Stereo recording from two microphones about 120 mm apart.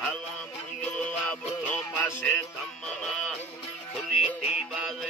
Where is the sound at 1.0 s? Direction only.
10° left (ahead or behind).